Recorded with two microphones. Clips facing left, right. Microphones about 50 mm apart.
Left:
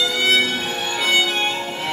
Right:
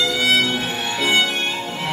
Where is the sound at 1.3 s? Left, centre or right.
Centre.